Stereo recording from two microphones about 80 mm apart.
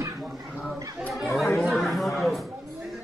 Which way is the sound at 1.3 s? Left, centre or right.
Centre.